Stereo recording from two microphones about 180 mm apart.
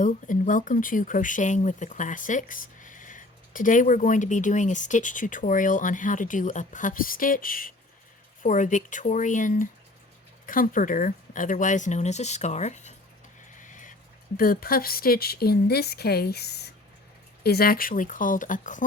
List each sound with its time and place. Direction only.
0.0 s speech: 45° left (ahead or behind)
13.6 s a sound: 45° left (ahead or behind)
14.3 s speech: 55° left (ahead or behind)